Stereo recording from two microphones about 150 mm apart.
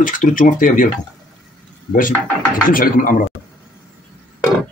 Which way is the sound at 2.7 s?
65° left (ahead or behind).